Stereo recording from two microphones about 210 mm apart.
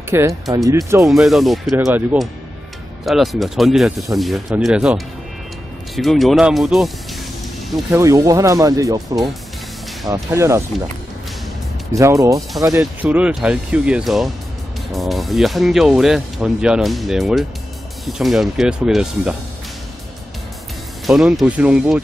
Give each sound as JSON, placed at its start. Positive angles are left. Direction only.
{"t": 0.1, "sound": "speech", "side_deg": -10}
{"t": 1.0, "sound": "speech", "side_deg": 0}
{"t": 7.9, "sound": "speech", "side_deg": -15}
{"t": 10.0, "sound": "speech", "side_deg": -15}
{"t": 11.9, "sound": "speech", "side_deg": -15}
{"t": 21.1, "sound": "speech", "side_deg": 0}